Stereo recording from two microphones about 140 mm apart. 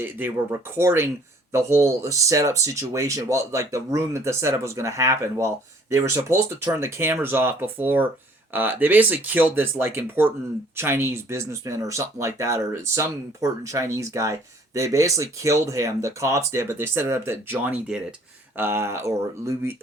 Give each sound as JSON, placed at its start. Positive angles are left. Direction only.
{"t": 0.0, "sound": "speech", "side_deg": -15}